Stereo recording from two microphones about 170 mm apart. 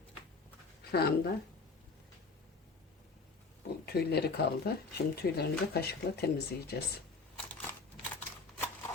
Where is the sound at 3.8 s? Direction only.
70° left (ahead or behind).